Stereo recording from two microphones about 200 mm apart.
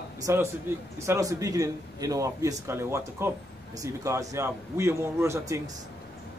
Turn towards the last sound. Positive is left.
turn(degrees=-15)  # may be behind; listen again after turning